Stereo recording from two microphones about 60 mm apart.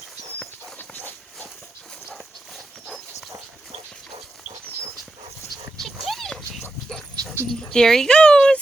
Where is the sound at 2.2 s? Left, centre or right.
Centre.